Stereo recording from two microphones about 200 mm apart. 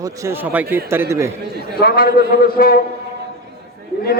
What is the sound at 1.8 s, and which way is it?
Speech, 45° left (ahead or behind).